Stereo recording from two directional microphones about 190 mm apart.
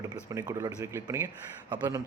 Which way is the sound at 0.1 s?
20° right (ahead or behind).